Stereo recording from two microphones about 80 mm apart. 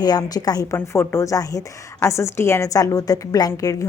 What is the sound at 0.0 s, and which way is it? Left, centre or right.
A woman's voice, left.